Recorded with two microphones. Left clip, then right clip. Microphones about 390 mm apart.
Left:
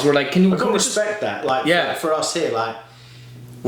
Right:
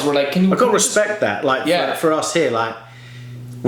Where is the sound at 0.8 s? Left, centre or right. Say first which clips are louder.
Right 4 dB; right.